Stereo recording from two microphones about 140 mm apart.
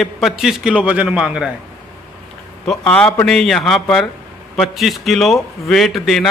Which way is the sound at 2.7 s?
5° left (ahead or behind).